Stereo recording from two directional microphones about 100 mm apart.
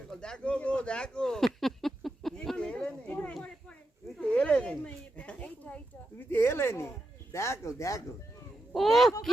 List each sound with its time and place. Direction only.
0.2 s a sound: 10° left (ahead or behind); by 6.9 s 25° left (ahead or behind)
7.3 s speech: 30° left (ahead or behind)
8.7 s speech: centre (ahead or behind)